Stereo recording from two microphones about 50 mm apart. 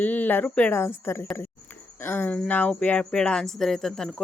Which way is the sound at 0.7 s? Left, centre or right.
Left.